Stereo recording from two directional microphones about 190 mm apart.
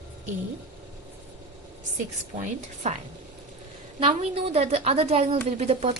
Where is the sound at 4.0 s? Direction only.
30° right (ahead or behind).